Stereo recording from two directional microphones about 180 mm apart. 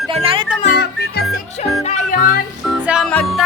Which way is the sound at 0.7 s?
60° left (ahead or behind).